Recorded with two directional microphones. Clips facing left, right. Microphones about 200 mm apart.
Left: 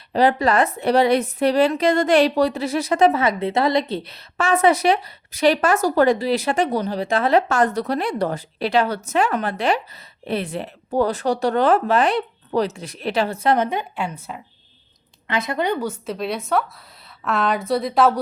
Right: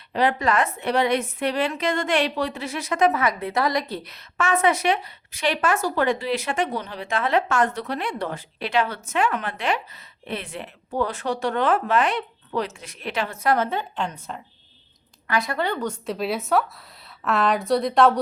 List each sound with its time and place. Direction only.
0.1 s a woman's voice: 35° left (ahead or behind); by 14.4 s 5° left (ahead or behind)
15.3 s a woman's voice: 20° left (ahead or behind); by 18.2 s centre (ahead or behind)